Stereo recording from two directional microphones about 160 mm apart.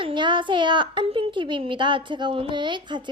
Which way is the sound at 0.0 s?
30° right (ahead or behind).